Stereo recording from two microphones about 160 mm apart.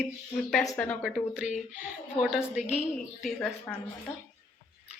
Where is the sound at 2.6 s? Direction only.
45° left (ahead or behind).